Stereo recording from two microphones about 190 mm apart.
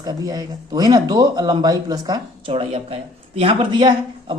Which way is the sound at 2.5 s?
30° right (ahead or behind).